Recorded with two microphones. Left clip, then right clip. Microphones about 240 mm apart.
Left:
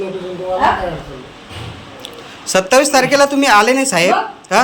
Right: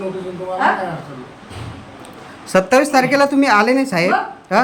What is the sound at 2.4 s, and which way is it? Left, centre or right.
A man's voice, centre.